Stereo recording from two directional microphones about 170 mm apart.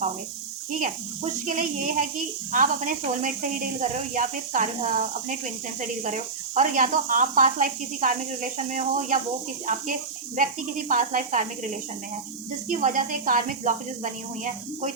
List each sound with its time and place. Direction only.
1.2 s speech: 50° right (ahead or behind)
10.3 s speech: 50° right (ahead or behind)
12.6 s speech: 50° right (ahead or behind)